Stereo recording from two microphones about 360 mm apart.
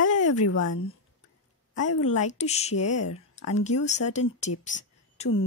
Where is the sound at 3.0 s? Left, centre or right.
Left.